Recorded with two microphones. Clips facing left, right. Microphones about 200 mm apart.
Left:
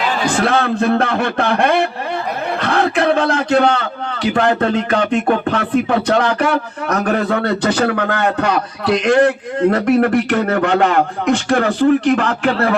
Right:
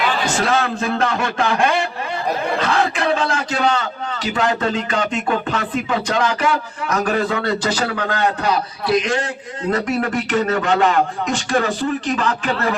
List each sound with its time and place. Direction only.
0.3 s a man's voice: 60° left (ahead or behind)